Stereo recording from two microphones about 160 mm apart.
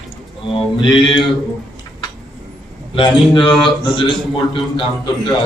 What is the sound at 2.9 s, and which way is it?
A man's voice, 30° left (ahead or behind).